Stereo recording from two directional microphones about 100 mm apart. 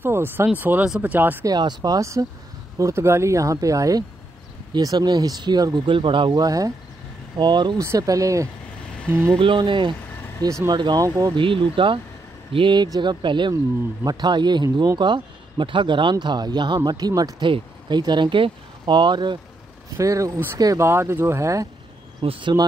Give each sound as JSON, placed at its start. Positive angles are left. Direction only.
{"t": 0.0, "sound": "speech", "side_deg": -25}
{"t": 1.4, "sound": "speech", "side_deg": -45}
{"t": 5.9, "sound": "speech", "side_deg": -55}
{"t": 6.4, "sound": "speech", "side_deg": -35}
{"t": 7.3, "sound": "speech", "side_deg": -50}
{"t": 7.8, "sound": "speech", "side_deg": -30}
{"t": 9.4, "sound": "speech", "side_deg": -55}
{"t": 11.3, "sound": "speech", "side_deg": -55}
{"t": 17.4, "sound": "speech", "side_deg": -50}
{"t": 20.0, "sound": "speech", "side_deg": -30}
{"t": 22.2, "sound": "speech", "side_deg": -70}